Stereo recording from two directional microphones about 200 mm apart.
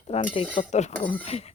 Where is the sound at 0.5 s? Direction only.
40° left (ahead or behind).